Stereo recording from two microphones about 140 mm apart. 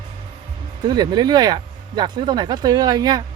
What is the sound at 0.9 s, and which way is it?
A man's voice, 30° right (ahead or behind).